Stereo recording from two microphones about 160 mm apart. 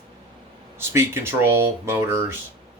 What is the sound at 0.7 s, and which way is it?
Speech, 15° right (ahead or behind).